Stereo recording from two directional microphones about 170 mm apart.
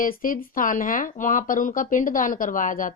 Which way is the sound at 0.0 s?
55° left (ahead or behind).